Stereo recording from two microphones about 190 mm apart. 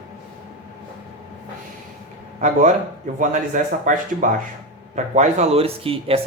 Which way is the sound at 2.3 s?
40° right (ahead or behind).